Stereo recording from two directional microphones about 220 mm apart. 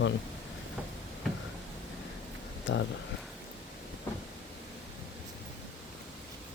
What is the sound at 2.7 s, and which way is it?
Speech, 55° left (ahead or behind).